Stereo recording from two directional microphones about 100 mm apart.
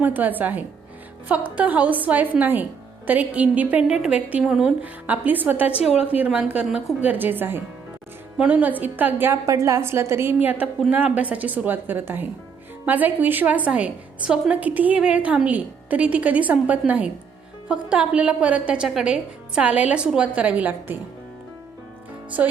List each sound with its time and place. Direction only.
0.0 s a woman's voice: 15° right (ahead or behind)